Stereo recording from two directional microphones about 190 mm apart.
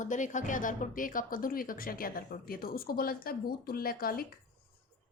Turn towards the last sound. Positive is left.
turn(degrees=50)  # may be behind; listen again after turning